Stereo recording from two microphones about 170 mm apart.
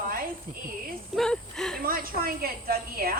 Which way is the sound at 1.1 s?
5° left (ahead or behind).